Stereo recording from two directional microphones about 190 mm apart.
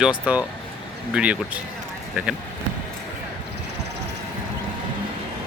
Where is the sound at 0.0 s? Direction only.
5° right (ahead or behind).